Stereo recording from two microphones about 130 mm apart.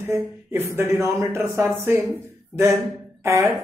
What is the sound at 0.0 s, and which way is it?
Speech, 20° right (ahead or behind).